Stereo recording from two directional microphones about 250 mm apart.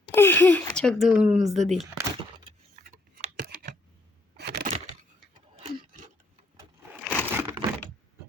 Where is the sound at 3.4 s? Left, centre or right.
Right.